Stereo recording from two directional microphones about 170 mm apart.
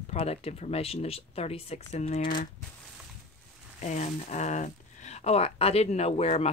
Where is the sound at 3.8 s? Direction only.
45° left (ahead or behind).